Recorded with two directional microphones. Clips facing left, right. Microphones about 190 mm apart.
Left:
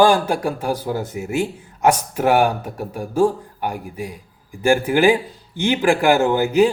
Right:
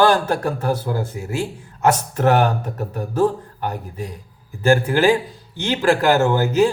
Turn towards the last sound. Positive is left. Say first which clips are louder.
# left 1 dB
turn(degrees=15)  # may be behind; listen again after turning